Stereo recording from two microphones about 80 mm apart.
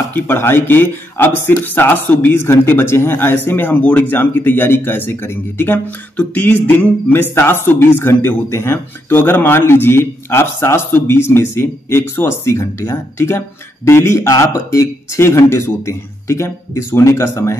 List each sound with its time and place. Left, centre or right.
0.1 s speech: left